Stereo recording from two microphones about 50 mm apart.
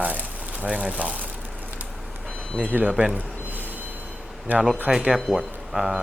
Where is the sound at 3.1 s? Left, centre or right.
Right.